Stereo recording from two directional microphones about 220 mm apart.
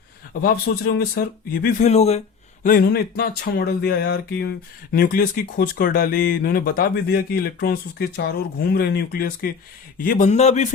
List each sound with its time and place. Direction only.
0.4 s speech: 40° left (ahead or behind)
1.6 s speech: 30° left (ahead or behind)
2.6 s a man's voice: 40° left (ahead or behind)